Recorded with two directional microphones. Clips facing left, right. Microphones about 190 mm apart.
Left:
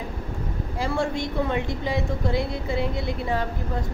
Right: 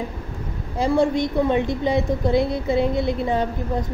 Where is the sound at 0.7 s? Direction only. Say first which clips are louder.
Right 7 dB; 20° right (ahead or behind).